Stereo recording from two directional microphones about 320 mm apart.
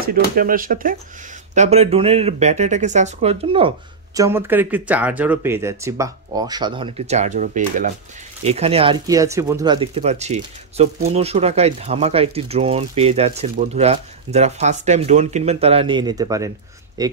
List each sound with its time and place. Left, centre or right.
0.1 s speech: right; by 17.1 s centre